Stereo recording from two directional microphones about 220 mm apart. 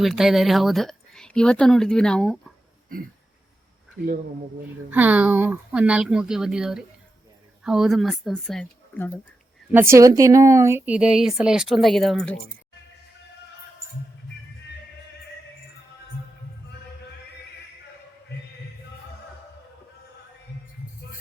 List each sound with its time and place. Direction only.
0.0 s speech: centre (ahead or behind)
4.0 s speech: 40° right (ahead or behind)
4.9 s speech: 5° right (ahead or behind)
9.7 s speech: 10° right (ahead or behind); by 12.4 s 5° left (ahead or behind)